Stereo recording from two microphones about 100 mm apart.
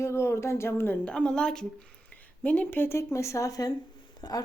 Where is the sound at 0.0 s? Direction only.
30° left (ahead or behind).